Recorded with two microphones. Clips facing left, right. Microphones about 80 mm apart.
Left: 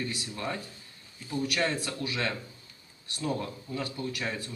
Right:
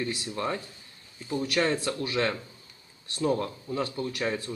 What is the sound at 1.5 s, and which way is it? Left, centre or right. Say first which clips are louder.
Speech: right 6 dB; right.